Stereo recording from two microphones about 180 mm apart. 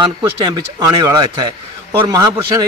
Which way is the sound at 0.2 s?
20° right (ahead or behind).